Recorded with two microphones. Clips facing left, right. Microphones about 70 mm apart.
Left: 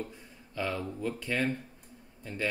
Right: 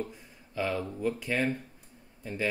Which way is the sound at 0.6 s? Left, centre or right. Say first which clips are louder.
Right 2 dB; centre.